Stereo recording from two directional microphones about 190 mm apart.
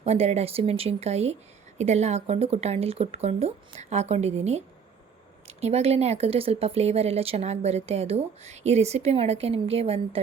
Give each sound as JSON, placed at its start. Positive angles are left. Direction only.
{"t": 0.0, "sound": "speech", "side_deg": -35}